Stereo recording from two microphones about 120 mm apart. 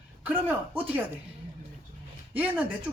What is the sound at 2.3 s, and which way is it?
Speech, 15° right (ahead or behind).